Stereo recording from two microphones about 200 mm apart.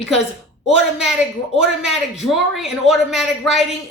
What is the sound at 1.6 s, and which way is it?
A man's voice, centre (ahead or behind).